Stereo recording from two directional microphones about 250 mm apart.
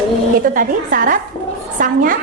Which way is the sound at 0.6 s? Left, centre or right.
Right.